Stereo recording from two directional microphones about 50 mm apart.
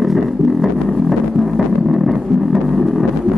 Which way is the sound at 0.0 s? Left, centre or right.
Centre.